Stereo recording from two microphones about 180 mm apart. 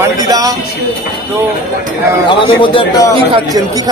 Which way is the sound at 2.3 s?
25° left (ahead or behind).